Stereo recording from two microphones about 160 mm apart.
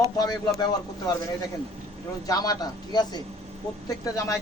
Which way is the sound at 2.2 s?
20° left (ahead or behind).